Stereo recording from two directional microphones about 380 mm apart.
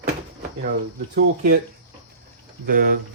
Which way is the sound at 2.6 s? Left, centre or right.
Right.